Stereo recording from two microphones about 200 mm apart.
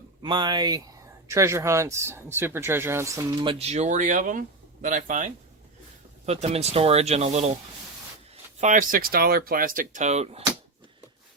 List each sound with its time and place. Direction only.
0.2 s speech: 20° right (ahead or behind)
3.5 s speech: 30° right (ahead or behind)
8.6 s speech: 40° right (ahead or behind)